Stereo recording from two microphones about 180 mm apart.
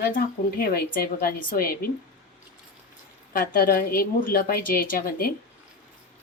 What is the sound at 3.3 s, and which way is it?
A woman's voice, 50° left (ahead or behind).